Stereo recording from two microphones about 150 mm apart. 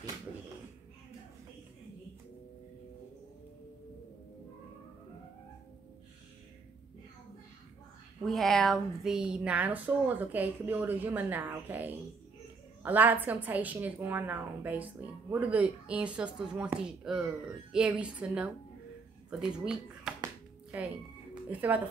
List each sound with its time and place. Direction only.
8.3 s speech: centre (ahead or behind)